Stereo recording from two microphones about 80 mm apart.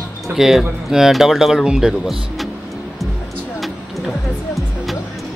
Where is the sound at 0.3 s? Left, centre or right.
Centre.